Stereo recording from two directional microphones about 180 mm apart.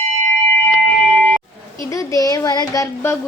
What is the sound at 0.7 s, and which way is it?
Music, 5° left (ahead or behind).